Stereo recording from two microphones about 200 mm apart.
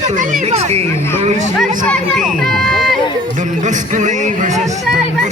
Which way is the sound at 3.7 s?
40° right (ahead or behind).